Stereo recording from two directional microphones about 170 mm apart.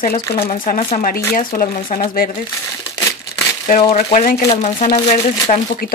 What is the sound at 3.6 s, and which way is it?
Speech, 45° left (ahead or behind).